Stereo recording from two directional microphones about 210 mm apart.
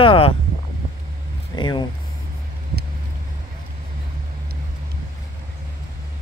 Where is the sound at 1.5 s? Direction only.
20° left (ahead or behind).